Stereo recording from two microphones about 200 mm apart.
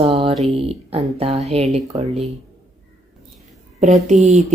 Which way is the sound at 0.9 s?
30° right (ahead or behind).